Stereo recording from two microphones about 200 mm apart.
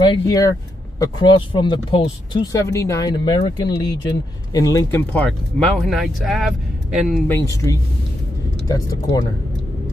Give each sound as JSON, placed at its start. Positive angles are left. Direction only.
{"t": 0.1, "sound": "speech", "side_deg": 20}
{"t": 5.8, "sound": "speech", "side_deg": 0}
{"t": 7.2, "sound": "speech", "side_deg": 15}